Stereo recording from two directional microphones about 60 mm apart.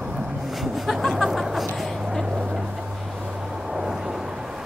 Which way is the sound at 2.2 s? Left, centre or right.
Centre.